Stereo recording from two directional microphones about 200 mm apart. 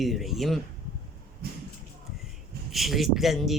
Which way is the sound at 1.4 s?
50° right (ahead or behind).